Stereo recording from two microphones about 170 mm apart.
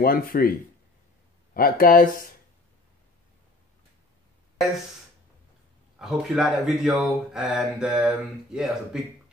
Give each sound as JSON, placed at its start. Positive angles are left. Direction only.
{"t": 0.0, "sound": "speech", "side_deg": 60}
{"t": 5.9, "sound": "speech", "side_deg": -5}